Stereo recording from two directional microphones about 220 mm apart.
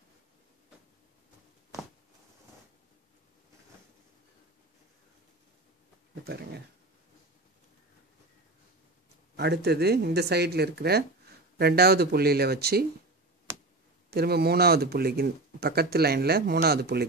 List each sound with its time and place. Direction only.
9.4 s speech: 50° right (ahead or behind)
14.1 s speech: 45° right (ahead or behind)